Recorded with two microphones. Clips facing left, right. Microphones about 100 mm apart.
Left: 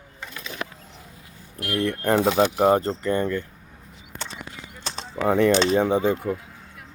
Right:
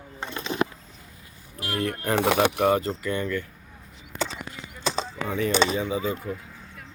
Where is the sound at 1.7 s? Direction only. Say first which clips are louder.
Left 3 dB; 45° right (ahead or behind).